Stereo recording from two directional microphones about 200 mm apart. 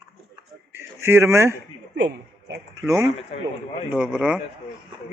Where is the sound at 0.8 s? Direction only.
10° right (ahead or behind).